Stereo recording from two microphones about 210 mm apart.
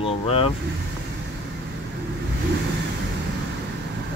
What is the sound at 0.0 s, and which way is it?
Vehicle, 25° left (ahead or behind).